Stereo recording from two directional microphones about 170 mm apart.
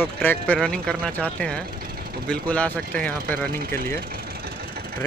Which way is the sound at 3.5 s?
60° right (ahead or behind).